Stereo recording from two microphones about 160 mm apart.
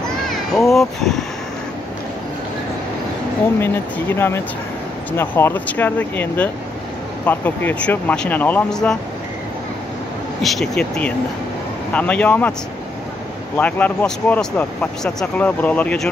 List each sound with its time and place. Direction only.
0.3 s a sound: centre (ahead or behind)
3.5 s speech: 15° left (ahead or behind)
10.4 s speech: centre (ahead or behind)
13.6 s speech: 10° left (ahead or behind)